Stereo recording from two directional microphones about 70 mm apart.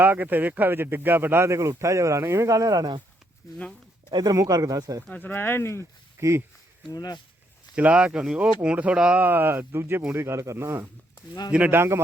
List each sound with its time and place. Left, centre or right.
0.0 s speech: right
1.5 s speech: right
4.1 s speech: right
5.0 s speech: centre
5.3 s speech: left
6.1 s speech: right
6.8 s speech: left
7.8 s speech: centre
9.2 s speech: right